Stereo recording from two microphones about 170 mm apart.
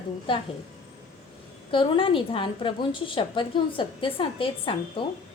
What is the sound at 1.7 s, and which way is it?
A woman's voice, 30° left (ahead or behind).